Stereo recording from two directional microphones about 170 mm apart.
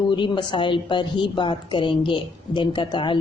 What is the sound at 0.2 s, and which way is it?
A woman's voice, 25° left (ahead or behind).